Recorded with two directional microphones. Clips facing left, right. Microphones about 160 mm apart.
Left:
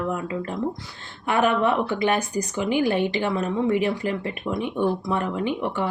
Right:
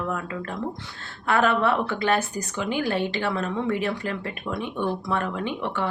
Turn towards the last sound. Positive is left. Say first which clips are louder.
# left 3 dB
turn(degrees=15)  # may be behind; listen again after turning